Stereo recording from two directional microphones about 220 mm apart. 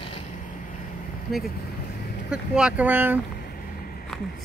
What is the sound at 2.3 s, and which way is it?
Speech, 5° right (ahead or behind).